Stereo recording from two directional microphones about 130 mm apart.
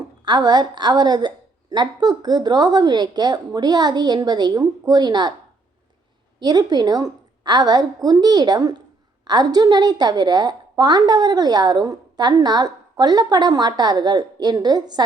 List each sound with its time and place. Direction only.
0.3 s a woman's voice: 35° right (ahead or behind)
6.4 s a woman's voice: 30° right (ahead or behind)